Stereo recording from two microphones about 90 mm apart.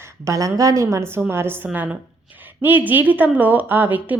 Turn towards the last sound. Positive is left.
turn(degrees=-20)  # may be behind; listen again after turning